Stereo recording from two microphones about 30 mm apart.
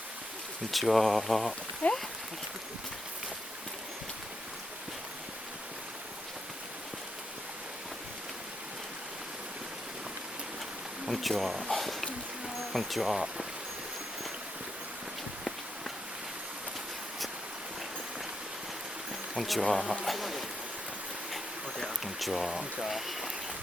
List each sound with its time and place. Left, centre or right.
0.7 s speech: centre
1.8 s speech: left
11.0 s speech: centre
11.7 s a sound: centre
12.5 s speech: centre
19.4 s speech: centre
20.1 s a sound: centre
21.8 s speech: centre